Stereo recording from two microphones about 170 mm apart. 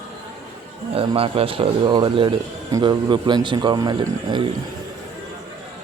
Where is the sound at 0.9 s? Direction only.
35° right (ahead or behind).